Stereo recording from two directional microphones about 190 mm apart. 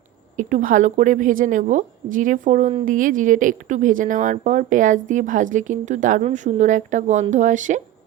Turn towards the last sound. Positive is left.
turn(degrees=-40)  # may be behind; listen again after turning